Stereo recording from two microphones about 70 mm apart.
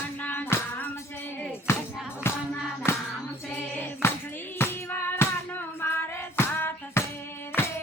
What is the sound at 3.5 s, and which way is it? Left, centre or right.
Music, left.